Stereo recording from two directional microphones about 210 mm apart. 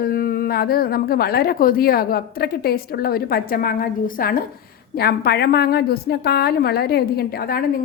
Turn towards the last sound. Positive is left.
turn(degrees=45)  # may be behind; listen again after turning